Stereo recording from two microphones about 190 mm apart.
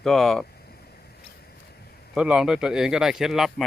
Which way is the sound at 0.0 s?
Centre (ahead or behind).